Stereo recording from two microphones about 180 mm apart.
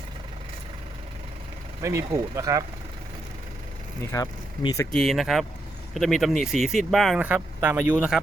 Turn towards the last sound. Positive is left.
turn(degrees=-10)  # may be behind; listen again after turning